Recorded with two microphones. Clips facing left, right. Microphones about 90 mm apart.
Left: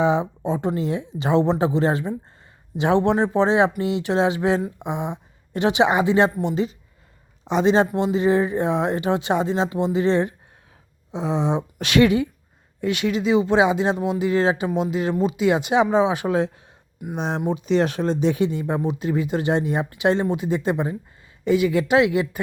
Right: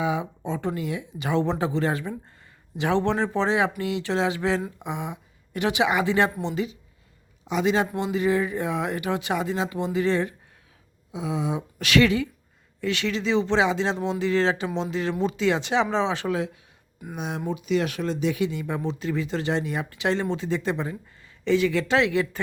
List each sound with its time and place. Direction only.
0.0 s speech: 30° left (ahead or behind)
0.4 s speech: 20° left (ahead or behind)
7.4 s speech: 30° left (ahead or behind); by 15.4 s 5° left (ahead or behind)
15.4 s speech: 20° left (ahead or behind)
17.2 s speech: 35° left (ahead or behind); by 22.4 s 20° left (ahead or behind)